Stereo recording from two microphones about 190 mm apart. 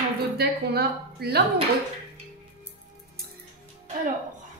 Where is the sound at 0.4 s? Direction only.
55° right (ahead or behind).